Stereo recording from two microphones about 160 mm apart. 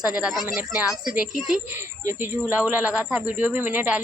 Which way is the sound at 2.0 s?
15° right (ahead or behind).